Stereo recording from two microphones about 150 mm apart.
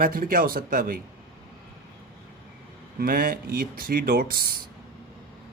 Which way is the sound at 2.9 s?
75° right (ahead or behind).